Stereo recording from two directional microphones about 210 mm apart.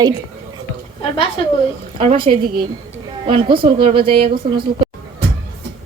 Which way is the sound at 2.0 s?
25° right (ahead or behind).